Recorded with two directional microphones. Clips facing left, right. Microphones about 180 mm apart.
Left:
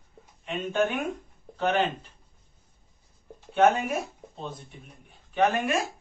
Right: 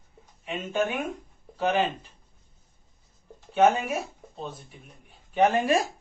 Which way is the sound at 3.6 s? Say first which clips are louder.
Even; 5° right (ahead or behind).